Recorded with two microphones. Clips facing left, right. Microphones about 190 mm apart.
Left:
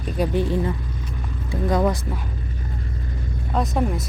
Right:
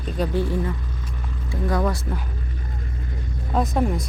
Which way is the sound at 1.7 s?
20° left (ahead or behind).